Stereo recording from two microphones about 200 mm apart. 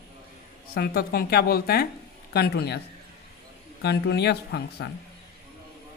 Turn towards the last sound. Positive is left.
turn(degrees=55)  # may be behind; listen again after turning